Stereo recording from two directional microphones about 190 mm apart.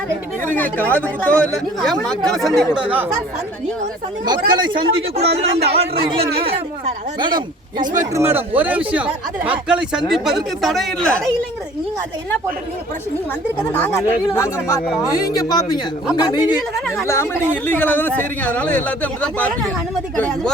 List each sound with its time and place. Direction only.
0.4 s speech: 10° left (ahead or behind); by 3.1 s 5° right (ahead or behind)
4.3 s speech: 25° right (ahead or behind); by 11.3 s 5° left (ahead or behind)
13.6 s speech: 10° left (ahead or behind)